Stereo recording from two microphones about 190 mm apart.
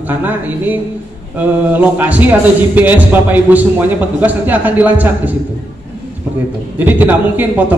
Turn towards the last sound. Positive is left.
turn(degrees=-10)  # may be behind; listen again after turning